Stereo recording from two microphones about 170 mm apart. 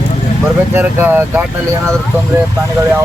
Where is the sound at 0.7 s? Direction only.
15° right (ahead or behind).